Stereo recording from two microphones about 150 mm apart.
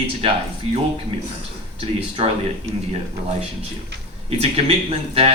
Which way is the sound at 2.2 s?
40° right (ahead or behind).